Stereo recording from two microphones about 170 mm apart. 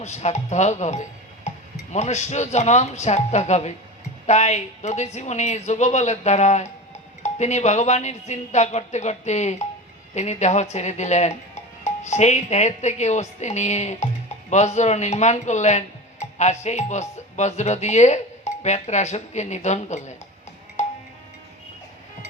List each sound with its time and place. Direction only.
0.0 s speech: 40° left (ahead or behind)
20.8 s music: 40° left (ahead or behind)